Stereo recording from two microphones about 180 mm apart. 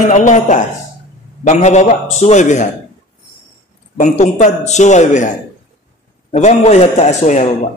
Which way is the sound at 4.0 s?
40° left (ahead or behind).